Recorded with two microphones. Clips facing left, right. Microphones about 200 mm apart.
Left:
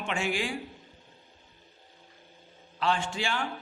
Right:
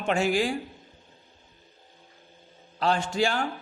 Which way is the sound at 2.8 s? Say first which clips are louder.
Right 5 dB; 40° right (ahead or behind).